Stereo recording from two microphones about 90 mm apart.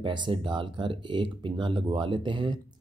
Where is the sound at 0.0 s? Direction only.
65° right (ahead or behind).